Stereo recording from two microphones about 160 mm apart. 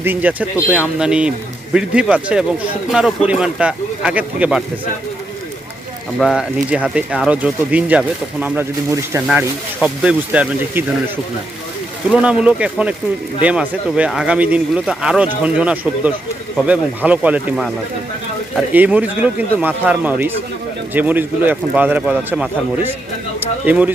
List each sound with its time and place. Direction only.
0.0 s speech: 10° right (ahead or behind)
6.1 s speech: centre (ahead or behind)
12.0 s speech: 5° right (ahead or behind)